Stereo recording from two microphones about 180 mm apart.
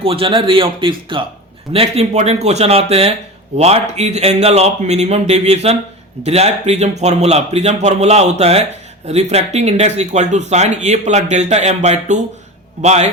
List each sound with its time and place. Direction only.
0.0 s speech: 30° right (ahead or behind)